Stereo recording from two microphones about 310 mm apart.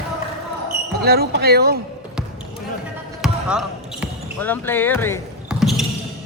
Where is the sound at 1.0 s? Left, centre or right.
Right.